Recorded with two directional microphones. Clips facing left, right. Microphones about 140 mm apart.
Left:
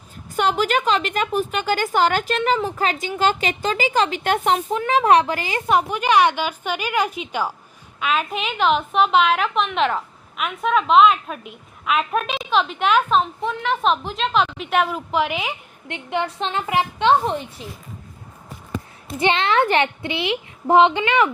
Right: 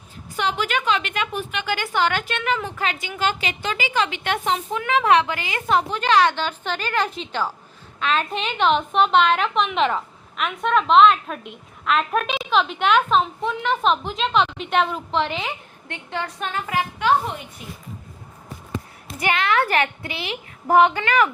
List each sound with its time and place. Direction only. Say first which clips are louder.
0.3 s a woman's voice: left 4 dB; 45° left (ahead or behind)
5.6 s a woman's voice: left 1 dB; 10° left (ahead or behind); by 17.4 s 30° left (ahead or behind)
19.2 s speech: left 3 dB; 25° left (ahead or behind)